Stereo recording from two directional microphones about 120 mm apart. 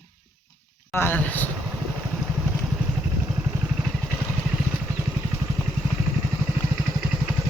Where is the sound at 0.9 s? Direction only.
15° left (ahead or behind).